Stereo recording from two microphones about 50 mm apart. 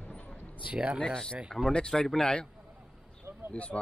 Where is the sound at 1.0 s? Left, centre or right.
Centre.